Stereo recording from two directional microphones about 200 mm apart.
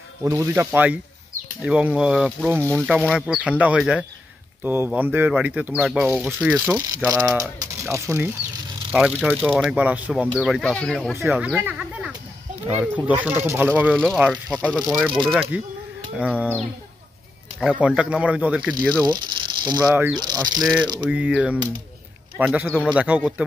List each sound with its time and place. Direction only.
0.2 s speech: 15° right (ahead or behind)
2.6 s speech: 5° left (ahead or behind)
11.2 s speech: 5° right (ahead or behind)
17.6 s speech: 5° right (ahead or behind)
19.0 s mechanisms: 20° right (ahead or behind)
19.9 s speech: 5° right (ahead or behind)
20.2 s bird: 20° right (ahead or behind)
20.5 s speech: centre (ahead or behind)